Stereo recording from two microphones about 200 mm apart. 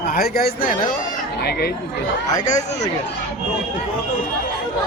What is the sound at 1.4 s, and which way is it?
Speech, 55° left (ahead or behind).